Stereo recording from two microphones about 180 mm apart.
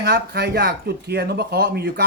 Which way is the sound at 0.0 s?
60° right (ahead or behind).